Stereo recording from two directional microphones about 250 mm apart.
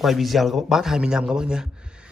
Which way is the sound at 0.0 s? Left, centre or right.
Centre.